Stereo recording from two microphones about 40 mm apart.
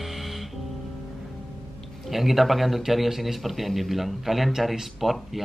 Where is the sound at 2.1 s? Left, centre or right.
Centre.